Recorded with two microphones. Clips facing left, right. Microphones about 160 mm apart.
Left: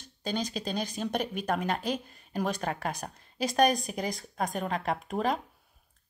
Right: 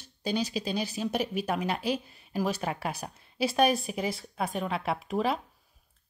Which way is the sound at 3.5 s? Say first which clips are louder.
Left 1 dB; 40° left (ahead or behind).